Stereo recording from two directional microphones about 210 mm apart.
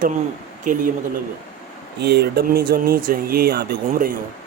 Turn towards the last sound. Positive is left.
turn(degrees=-45)  # may be behind; listen again after turning